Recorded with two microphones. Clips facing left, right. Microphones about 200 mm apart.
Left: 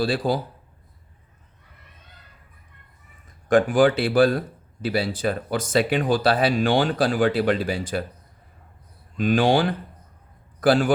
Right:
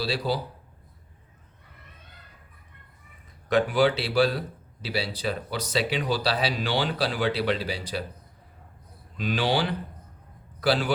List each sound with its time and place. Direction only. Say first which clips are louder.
0.0 s a man's voice: left 5 dB; 50° left (ahead or behind)
3.2 s a man's voice: left 5 dB; 50° left (ahead or behind)
9.1 s a man's voice: left 7 dB; 50° left (ahead or behind)